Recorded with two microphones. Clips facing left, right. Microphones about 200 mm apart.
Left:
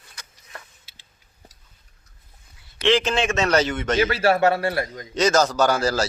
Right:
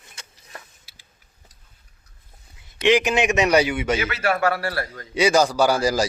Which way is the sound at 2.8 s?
15° right (ahead or behind).